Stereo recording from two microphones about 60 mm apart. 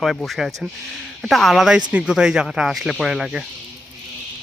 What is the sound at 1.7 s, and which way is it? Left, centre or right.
Speech, centre.